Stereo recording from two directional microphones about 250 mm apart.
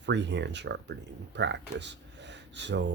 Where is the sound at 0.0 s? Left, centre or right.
Right.